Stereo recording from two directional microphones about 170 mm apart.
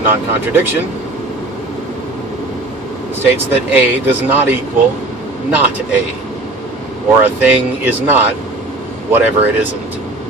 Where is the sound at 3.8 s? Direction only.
10° right (ahead or behind).